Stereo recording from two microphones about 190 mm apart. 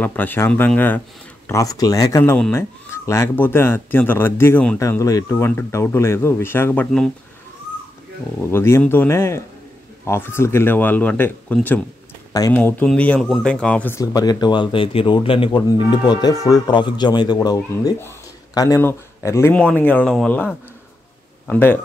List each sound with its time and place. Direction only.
0.0 s speech: 10° left (ahead or behind)
8.4 s speech: 15° left (ahead or behind)
21.5 s speech: 10° left (ahead or behind)